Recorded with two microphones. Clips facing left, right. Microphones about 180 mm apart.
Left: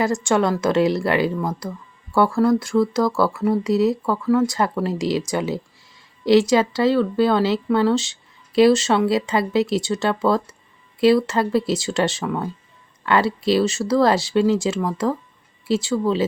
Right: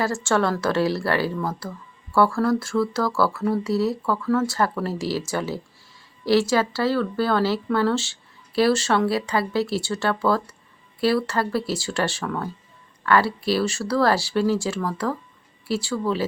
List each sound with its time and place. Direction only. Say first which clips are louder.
0.0 s speech: left 3 dB; 15° left (ahead or behind)